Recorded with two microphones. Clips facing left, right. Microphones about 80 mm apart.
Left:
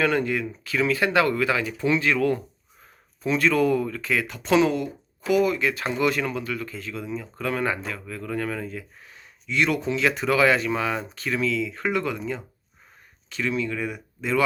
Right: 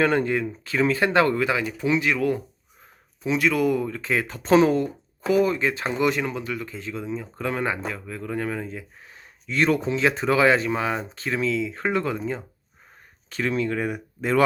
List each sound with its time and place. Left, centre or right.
0.0 s speech: right
9.5 s speech: right
13.3 s speech: right